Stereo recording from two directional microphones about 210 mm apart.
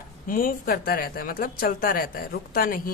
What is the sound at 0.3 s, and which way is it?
A woman's voice, 40° left (ahead or behind).